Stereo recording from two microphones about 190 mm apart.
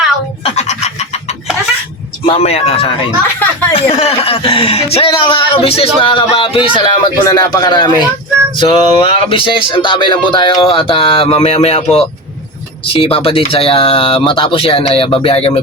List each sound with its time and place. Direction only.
0.4 s frog: 35° left (ahead or behind)
2.2 s speech: 30° left (ahead or behind)